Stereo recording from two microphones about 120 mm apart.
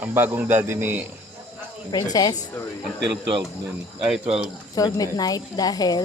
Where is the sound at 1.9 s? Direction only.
35° left (ahead or behind).